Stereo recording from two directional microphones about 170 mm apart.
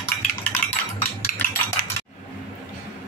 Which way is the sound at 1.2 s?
15° left (ahead or behind).